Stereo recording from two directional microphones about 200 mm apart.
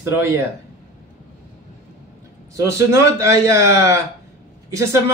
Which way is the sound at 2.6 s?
15° right (ahead or behind).